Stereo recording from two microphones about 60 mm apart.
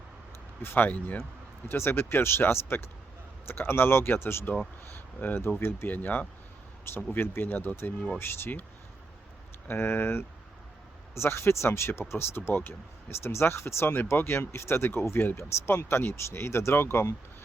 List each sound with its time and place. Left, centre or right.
0.6 s speech: left
1.6 s speech: left
5.9 s speech: left
6.8 s speech: left
9.6 s speech: left